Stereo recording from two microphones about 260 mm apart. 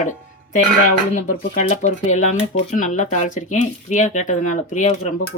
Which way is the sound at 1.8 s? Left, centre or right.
Left.